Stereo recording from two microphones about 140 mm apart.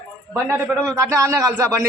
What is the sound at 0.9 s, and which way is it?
Speech, 20° right (ahead or behind).